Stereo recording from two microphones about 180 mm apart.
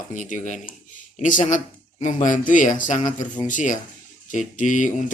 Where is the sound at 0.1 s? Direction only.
45° left (ahead or behind).